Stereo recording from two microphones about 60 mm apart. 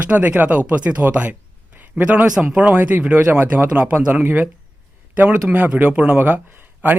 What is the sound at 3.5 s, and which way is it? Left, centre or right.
Speech, right.